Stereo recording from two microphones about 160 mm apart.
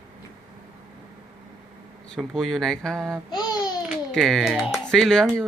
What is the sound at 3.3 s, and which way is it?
Babbling, 25° left (ahead or behind).